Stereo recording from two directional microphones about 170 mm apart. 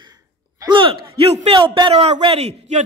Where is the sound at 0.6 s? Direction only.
30° right (ahead or behind).